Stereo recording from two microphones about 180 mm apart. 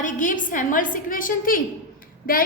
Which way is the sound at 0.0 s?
45° left (ahead or behind).